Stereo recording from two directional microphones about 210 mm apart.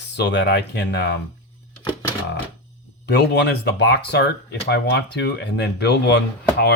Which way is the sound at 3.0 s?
55° left (ahead or behind).